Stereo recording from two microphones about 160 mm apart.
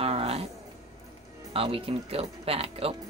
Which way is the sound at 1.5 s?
35° right (ahead or behind).